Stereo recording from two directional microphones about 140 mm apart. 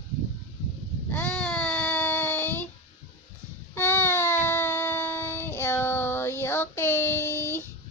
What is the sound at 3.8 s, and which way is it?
Child singing, 15° left (ahead or behind).